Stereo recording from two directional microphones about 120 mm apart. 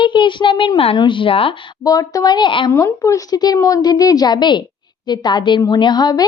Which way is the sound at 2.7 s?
25° left (ahead or behind).